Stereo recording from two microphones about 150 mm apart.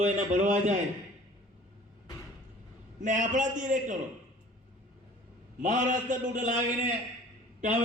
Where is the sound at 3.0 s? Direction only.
55° right (ahead or behind).